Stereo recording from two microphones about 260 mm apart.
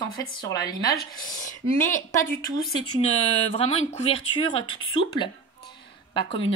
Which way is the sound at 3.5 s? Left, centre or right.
Left.